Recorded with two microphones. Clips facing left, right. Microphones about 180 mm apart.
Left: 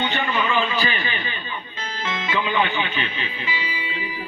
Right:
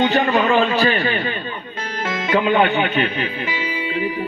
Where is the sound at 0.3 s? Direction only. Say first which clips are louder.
Right 7 dB; 45° right (ahead or behind).